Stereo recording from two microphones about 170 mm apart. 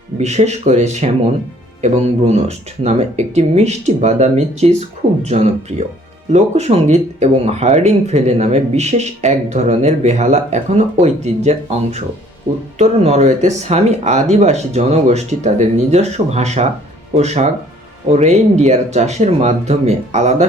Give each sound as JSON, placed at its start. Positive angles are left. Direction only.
{"t": 0.2, "sound": "speech", "side_deg": -40}